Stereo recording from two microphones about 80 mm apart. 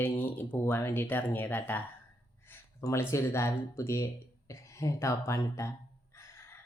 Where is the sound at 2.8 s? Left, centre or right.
Left.